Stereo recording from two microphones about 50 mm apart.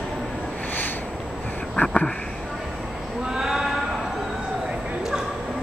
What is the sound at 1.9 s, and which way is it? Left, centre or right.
Speech, centre.